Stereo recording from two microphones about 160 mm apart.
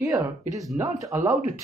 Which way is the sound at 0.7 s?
20° right (ahead or behind).